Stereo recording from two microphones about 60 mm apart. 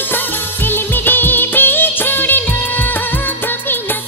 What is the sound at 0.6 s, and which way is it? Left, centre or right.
Music of bollywood, left.